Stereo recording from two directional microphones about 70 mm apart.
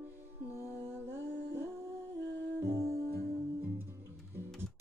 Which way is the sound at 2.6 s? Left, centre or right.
Right.